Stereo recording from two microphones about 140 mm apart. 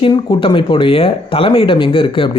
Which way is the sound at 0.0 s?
35° left (ahead or behind).